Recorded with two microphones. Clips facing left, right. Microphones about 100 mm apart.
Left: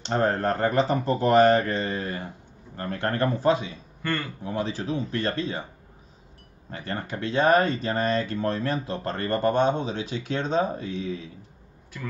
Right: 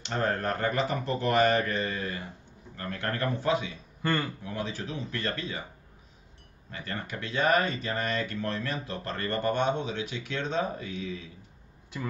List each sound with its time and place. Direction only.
0.1 s speech: 35° left (ahead or behind)
4.0 s a man's voice: 15° right (ahead or behind)
4.4 s speech: 30° left (ahead or behind)
6.7 s speech: 35° left (ahead or behind)